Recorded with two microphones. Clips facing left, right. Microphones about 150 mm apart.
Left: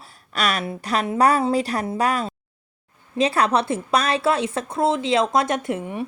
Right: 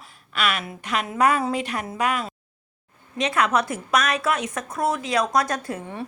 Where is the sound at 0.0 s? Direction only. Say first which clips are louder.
Left 1 dB; 35° left (ahead or behind).